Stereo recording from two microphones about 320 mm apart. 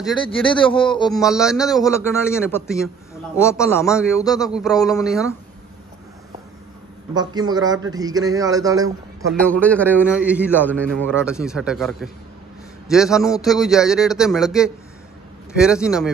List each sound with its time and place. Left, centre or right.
0.2 s a man's voice: centre
1.2 s a man's voice: centre
1.7 s a man's voice: centre
5.0 s a man's voice: centre
7.2 s a man's voice: centre
9.3 s a man's voice: centre